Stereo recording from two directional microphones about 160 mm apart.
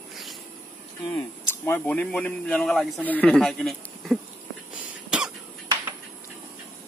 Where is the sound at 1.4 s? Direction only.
15° left (ahead or behind).